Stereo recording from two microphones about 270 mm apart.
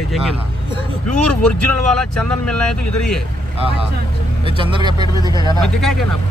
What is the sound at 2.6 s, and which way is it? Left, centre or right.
Speech, left.